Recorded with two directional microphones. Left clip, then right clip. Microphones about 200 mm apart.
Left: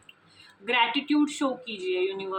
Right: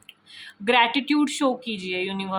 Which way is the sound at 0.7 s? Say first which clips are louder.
Right 5 dB; 50° right (ahead or behind).